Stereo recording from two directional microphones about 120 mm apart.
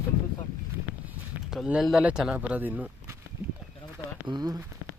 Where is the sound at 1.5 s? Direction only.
5° right (ahead or behind).